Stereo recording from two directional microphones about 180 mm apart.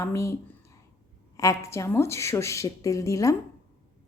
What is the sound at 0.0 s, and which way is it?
Speech, 15° left (ahead or behind).